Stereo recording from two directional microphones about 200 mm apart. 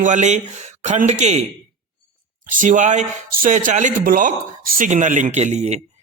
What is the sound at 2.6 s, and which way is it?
A man's voice, 40° right (ahead or behind).